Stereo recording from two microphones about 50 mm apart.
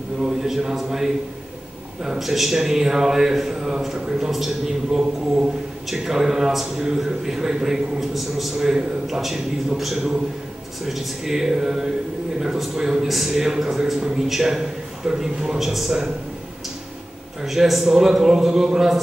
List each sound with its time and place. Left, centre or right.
0.2 s a man's voice: centre
2.1 s a man's voice: centre
17.4 s a man's voice: centre